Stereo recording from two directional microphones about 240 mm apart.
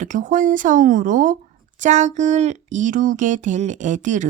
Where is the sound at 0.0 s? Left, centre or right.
Right.